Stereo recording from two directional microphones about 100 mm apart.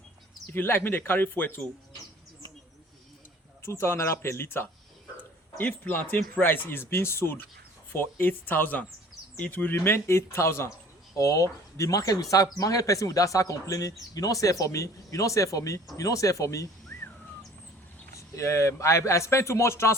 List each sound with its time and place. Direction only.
0.5 s speech: 20° left (ahead or behind)
3.6 s speech: 25° left (ahead or behind)
18.2 s speech: 30° left (ahead or behind)